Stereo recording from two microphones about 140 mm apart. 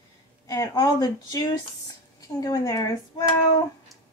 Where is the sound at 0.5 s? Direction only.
25° left (ahead or behind).